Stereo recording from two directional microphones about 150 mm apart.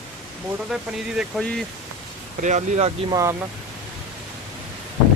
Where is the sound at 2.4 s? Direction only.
55° right (ahead or behind).